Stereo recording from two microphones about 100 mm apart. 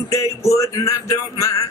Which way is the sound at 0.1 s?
30° left (ahead or behind).